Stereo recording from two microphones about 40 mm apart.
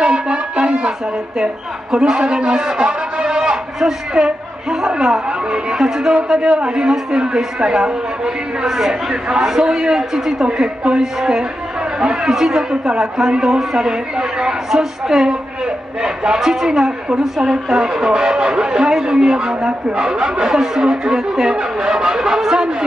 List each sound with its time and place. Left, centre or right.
0.0 s a sound: right
1.4 s a man's voice: centre
10.6 s speech: right
11.0 s speech: centre